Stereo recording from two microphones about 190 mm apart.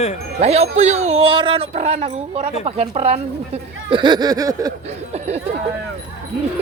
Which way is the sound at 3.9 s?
25° right (ahead or behind).